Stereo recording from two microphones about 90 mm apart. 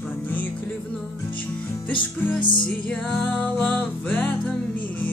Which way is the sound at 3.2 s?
20° left (ahead or behind).